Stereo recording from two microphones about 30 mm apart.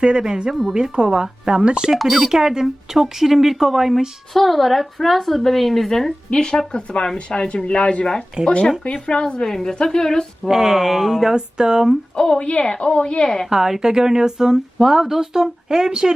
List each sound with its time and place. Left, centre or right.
0.0 s speech: right
1.8 s a woman's voice: centre
2.3 s a woman's voice: centre
4.4 s a woman's voice: centre
6.3 s a woman's voice: left
8.4 s speech: right
8.8 s a woman's voice: left
9.4 s a woman's voice: centre
10.5 s a woman's voice: centre
11.3 s speech: right
12.4 s a woman's voice: left
13.2 s a woman's voice: centre
13.5 s speech: centre